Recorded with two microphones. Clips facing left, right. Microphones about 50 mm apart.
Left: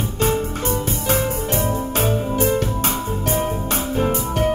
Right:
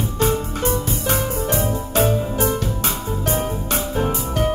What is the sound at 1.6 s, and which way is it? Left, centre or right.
Music, left.